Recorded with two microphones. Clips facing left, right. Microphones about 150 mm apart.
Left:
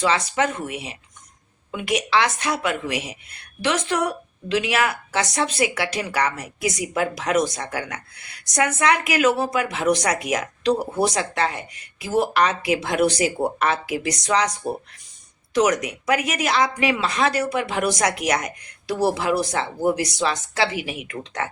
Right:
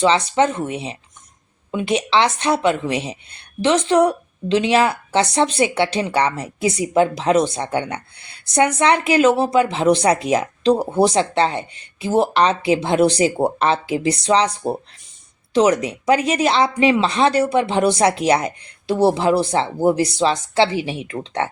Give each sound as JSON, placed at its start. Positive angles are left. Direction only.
{"t": 0.0, "sound": "a woman's voice", "side_deg": -25}